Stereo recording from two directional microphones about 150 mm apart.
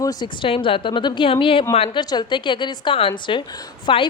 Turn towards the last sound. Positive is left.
turn(degrees=30)  # may be behind; listen again after turning